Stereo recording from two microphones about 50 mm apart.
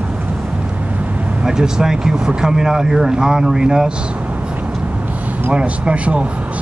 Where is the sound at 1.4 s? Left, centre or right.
Centre.